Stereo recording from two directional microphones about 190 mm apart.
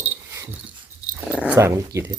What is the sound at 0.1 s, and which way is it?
Dog, 10° right (ahead or behind).